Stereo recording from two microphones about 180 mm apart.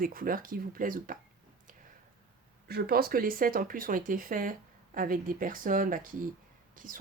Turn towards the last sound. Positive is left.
turn(degrees=-50)  # may be behind; listen again after turning